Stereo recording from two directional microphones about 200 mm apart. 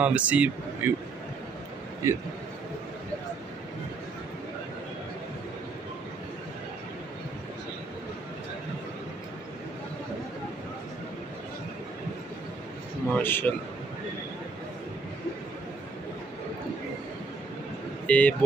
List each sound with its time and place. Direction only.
0.0 s a man's voice: 5° right (ahead or behind)
2.0 s a man's voice: 15° right (ahead or behind)
13.1 s a man's voice: 10° left (ahead or behind)
18.0 s speech: 5° left (ahead or behind)